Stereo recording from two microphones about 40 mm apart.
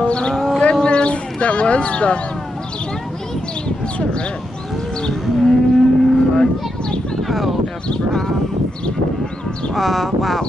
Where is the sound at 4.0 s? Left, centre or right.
Left.